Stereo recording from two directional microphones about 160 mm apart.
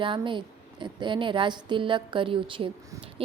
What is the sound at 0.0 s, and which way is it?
Speech, 30° right (ahead or behind).